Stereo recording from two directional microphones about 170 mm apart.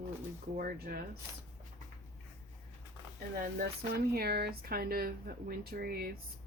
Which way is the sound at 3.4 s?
65° right (ahead or behind).